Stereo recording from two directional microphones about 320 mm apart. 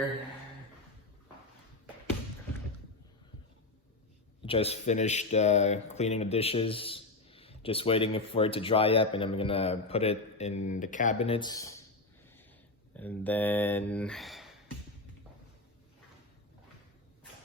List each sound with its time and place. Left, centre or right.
4.4 s speech: centre
12.9 s speech: centre